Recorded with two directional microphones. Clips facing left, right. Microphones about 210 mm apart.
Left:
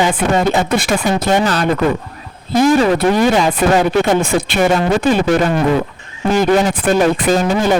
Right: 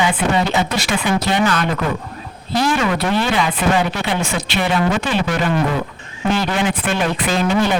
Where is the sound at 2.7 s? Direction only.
35° left (ahead or behind).